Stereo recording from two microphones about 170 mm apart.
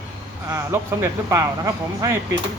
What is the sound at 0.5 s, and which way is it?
Speech, 15° right (ahead or behind).